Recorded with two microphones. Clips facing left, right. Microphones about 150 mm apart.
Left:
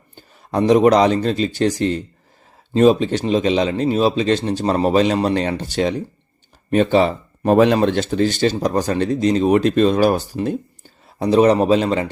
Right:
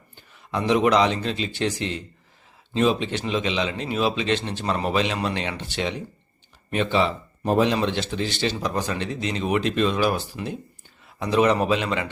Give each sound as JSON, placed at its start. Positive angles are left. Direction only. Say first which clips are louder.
{"t": 0.2, "sound": "a man's voice", "louder": "left 8 dB", "side_deg": 40}
{"t": 7.4, "sound": "a man's voice", "louder": "left 7 dB", "side_deg": 65}